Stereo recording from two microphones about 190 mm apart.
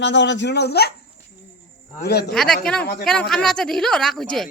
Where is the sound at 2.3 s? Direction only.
5° left (ahead or behind).